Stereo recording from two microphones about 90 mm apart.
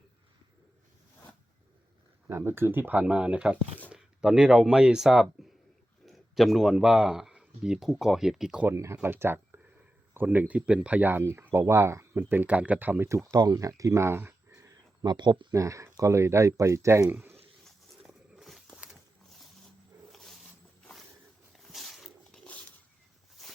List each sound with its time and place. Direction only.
2.2 s speech: 30° right (ahead or behind); by 5.5 s 5° right (ahead or behind)
6.1 s a sound: centre (ahead or behind)
6.7 s speech: 10° right (ahead or behind)
8.6 s speech: 30° right (ahead or behind)
12.2 s speech: 20° right (ahead or behind)
13.3 s speech: 45° right (ahead or behind); by 14.3 s 25° right (ahead or behind)
15.0 s speech: 50° right (ahead or behind)
15.5 s speech: 35° right (ahead or behind)
17.1 s speech: 20° right (ahead or behind)
17.7 s a sound: centre (ahead or behind)
20.1 s wild animals: centre (ahead or behind)
21.6 s dog: centre (ahead or behind)